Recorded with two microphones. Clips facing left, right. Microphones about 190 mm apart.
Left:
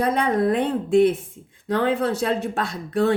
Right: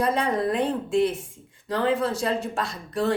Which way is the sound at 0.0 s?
55° left (ahead or behind).